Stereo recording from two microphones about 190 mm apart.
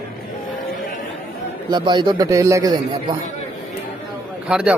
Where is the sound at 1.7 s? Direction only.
25° right (ahead or behind).